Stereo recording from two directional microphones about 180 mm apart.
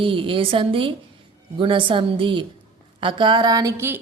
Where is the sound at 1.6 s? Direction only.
30° right (ahead or behind).